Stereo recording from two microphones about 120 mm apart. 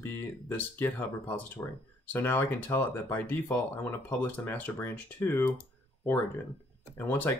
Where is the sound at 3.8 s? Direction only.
15° left (ahead or behind).